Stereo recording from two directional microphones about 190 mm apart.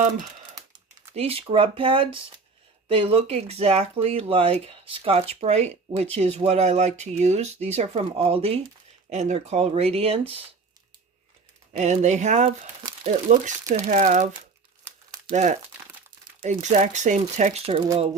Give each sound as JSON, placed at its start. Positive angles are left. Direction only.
{"t": 1.1, "sound": "speech", "side_deg": -30}
{"t": 11.8, "sound": "speech", "side_deg": -35}
{"t": 15.3, "sound": "speech", "side_deg": -40}